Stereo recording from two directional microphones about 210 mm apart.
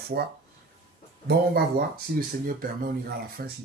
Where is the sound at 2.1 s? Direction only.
40° right (ahead or behind).